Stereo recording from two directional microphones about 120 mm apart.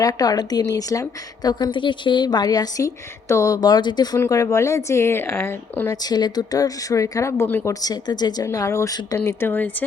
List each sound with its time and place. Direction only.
0.0 s a woman's voice: 30° left (ahead or behind)
5.9 s speech: 35° left (ahead or behind)
7.7 s a woman's voice: 30° left (ahead or behind)
8.4 s speech: 25° left (ahead or behind)
9.2 s speech: 20° left (ahead or behind)